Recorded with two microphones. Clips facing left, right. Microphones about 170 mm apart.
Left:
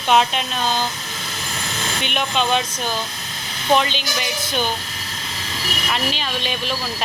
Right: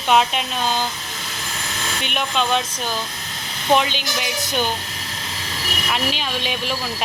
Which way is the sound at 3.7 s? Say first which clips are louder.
Even; 10° right (ahead or behind).